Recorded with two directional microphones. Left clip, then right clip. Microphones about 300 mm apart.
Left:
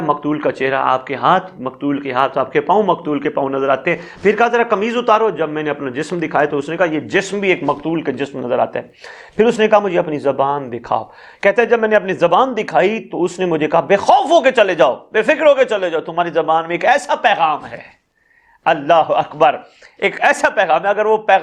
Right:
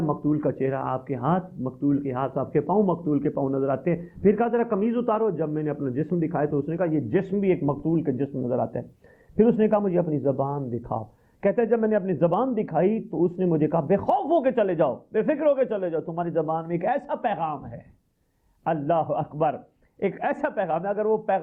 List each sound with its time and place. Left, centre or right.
0.3 s a man's voice: centre
18.6 s a man's voice: centre